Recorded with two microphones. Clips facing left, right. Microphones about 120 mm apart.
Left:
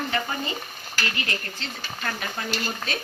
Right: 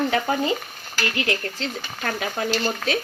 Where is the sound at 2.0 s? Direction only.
75° right (ahead or behind).